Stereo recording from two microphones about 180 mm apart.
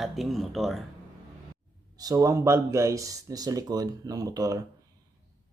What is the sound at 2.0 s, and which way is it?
Speech, 20° right (ahead or behind).